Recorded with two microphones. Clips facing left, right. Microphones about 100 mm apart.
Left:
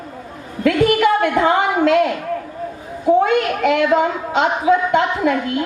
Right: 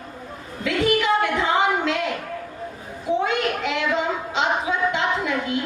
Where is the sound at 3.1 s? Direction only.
50° left (ahead or behind).